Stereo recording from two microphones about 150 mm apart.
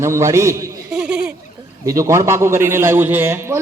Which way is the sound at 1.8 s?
20° right (ahead or behind).